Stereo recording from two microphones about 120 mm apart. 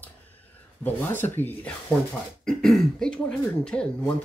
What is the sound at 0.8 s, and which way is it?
Speech, 15° left (ahead or behind).